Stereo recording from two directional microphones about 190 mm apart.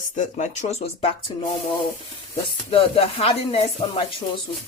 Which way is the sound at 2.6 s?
30° left (ahead or behind).